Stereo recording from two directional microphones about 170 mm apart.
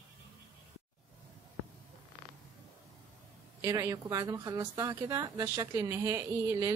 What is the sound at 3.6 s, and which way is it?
A woman's voice, 20° right (ahead or behind).